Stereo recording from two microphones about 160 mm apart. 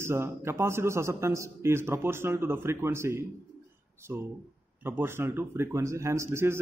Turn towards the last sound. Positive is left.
turn(degrees=-15)  # may be behind; listen again after turning